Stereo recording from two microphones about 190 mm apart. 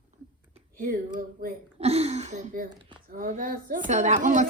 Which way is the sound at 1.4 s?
50° right (ahead or behind).